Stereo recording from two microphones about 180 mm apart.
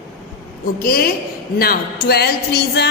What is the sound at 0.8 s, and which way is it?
A woman's voice, 55° left (ahead or behind).